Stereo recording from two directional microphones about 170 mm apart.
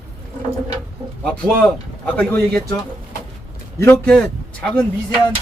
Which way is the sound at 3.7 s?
10° left (ahead or behind).